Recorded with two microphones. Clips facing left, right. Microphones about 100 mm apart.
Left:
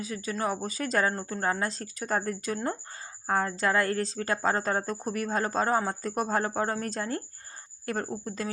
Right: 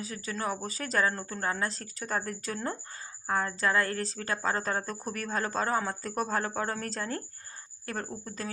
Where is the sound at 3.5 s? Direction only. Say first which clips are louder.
Left 2 dB; 30° left (ahead or behind).